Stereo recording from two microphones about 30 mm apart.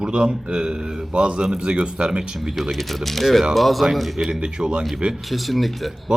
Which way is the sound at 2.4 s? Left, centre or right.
Centre.